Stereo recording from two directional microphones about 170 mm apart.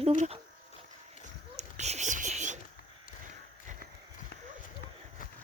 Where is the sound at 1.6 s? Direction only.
40° right (ahead or behind).